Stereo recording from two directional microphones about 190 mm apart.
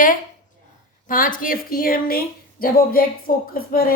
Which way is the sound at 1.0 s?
45° left (ahead or behind).